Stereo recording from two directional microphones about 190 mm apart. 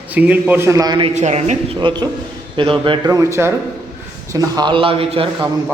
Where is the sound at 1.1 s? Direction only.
40° right (ahead or behind).